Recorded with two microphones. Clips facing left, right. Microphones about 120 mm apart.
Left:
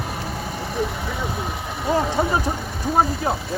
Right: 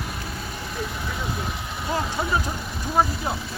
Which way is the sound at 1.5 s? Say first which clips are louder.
Left 5 dB; 55° left (ahead or behind).